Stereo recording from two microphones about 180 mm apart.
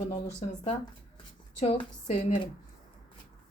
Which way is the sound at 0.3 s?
35° left (ahead or behind).